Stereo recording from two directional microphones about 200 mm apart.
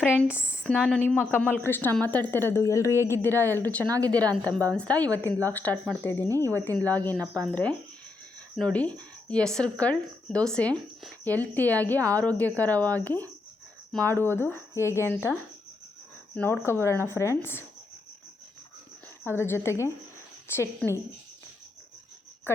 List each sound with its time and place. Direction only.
0.3 s speech: 5° right (ahead or behind); by 2.9 s 15° left (ahead or behind)
2.9 s a woman's voice: 15° right (ahead or behind)
3.7 s speech: 5° left (ahead or behind)
6.2 s a woman's voice: 15° right (ahead or behind)
6.5 s speech: 10° left (ahead or behind)
19.2 s speech: 10° left (ahead or behind)